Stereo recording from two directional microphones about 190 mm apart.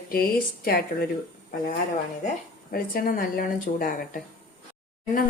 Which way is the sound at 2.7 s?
50° left (ahead or behind).